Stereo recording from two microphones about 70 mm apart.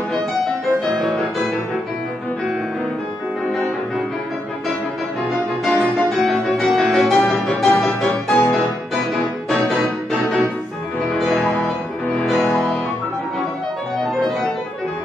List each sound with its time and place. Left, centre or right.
5.7 s music: centre
8.3 s music: left